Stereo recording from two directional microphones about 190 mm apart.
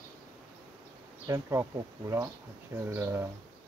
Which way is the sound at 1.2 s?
15° right (ahead or behind).